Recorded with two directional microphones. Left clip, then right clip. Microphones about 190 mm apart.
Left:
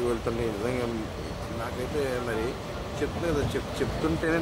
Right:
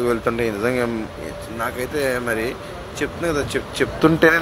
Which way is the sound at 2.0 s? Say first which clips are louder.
Right 8 dB; 15° right (ahead or behind).